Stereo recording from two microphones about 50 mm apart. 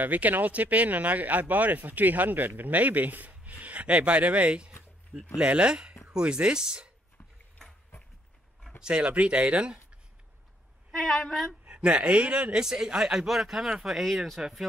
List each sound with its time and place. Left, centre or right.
0.0 s speech: right; by 6.9 s centre
8.8 s speech: right
10.9 s a woman's voice: centre
11.6 s a man's voice: right
12.6 s speech: centre
13.9 s a woman's voice: centre